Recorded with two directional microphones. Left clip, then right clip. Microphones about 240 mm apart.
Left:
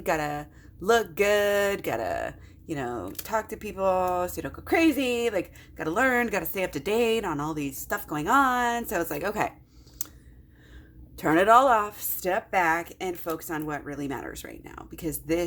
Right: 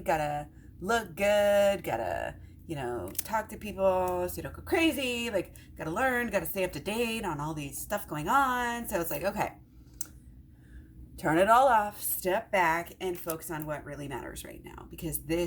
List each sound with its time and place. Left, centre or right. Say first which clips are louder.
0.0 s speech: left 2 dB; left
11.2 s speech: left 4 dB; left